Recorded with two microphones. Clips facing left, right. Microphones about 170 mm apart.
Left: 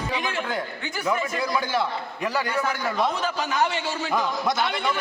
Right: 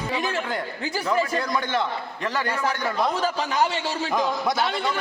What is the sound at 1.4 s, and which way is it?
A man's voice, 10° left (ahead or behind).